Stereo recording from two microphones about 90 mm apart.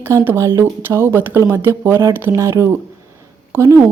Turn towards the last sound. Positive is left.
turn(degrees=-30)  # may be behind; listen again after turning